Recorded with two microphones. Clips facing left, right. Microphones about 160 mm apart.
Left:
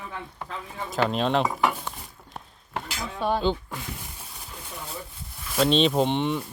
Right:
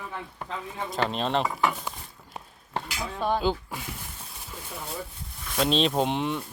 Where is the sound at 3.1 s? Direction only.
Centre (ahead or behind).